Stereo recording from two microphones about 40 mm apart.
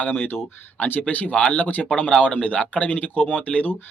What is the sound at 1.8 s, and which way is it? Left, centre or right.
Speech, left.